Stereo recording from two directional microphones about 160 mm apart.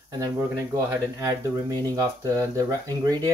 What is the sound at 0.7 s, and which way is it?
Speech, 20° right (ahead or behind).